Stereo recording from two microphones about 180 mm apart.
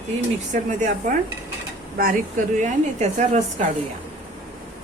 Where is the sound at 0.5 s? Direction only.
45° right (ahead or behind).